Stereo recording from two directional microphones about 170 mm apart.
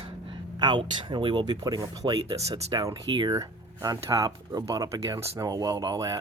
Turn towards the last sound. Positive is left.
turn(degrees=-20)  # may be behind; listen again after turning